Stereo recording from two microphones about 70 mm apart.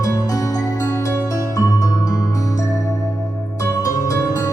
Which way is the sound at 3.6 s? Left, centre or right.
Left.